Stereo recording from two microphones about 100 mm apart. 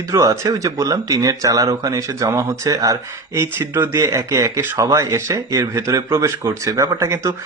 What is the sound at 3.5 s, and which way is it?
Speech, 25° right (ahead or behind).